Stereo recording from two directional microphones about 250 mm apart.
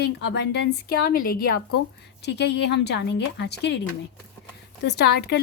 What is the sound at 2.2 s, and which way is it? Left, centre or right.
Speech, left.